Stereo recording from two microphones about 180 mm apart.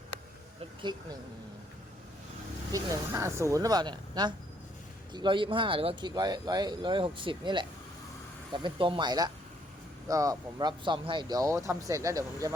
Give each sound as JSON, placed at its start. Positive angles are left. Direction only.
{"t": 2.7, "sound": "speech", "side_deg": -15}